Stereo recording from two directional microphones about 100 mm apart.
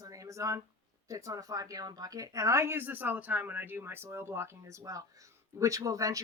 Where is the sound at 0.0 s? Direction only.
35° right (ahead or behind).